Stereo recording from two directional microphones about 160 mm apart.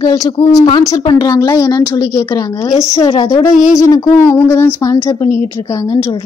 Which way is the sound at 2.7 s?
40° left (ahead or behind).